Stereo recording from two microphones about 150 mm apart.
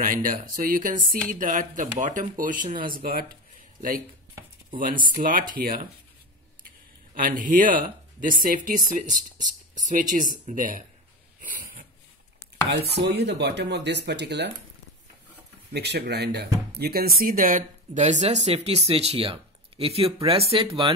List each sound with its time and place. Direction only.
0.0 s speech: 65° right (ahead or behind)
3.0 s speech: 80° right
4.6 s speech: 65° right (ahead or behind)
7.2 s speech: 65° right (ahead or behind)
12.7 s speech: 90° right
15.7 s speech: 90° right; by 20.9 s 35° right (ahead or behind)